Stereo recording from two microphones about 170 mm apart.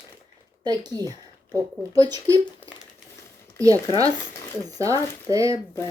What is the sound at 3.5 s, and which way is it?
Speech, 20° right (ahead or behind).